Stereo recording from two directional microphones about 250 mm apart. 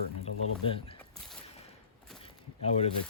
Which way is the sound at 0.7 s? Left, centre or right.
Left.